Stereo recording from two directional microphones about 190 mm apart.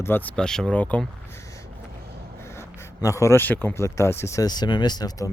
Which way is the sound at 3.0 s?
15° left (ahead or behind).